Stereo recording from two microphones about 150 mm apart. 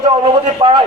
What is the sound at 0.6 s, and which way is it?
Speech, 25° right (ahead or behind).